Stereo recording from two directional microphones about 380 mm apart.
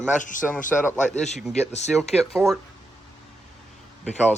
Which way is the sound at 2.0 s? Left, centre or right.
Centre.